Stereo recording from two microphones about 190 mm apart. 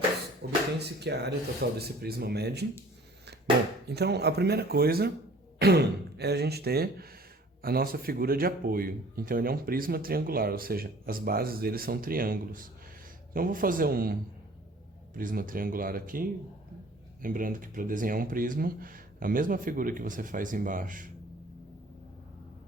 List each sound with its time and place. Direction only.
0.4 s a sound: 60° right (ahead or behind)
0.8 s speech: 60° right (ahead or behind)
3.8 s speech: 60° right (ahead or behind)
17.2 s speech: 45° right (ahead or behind)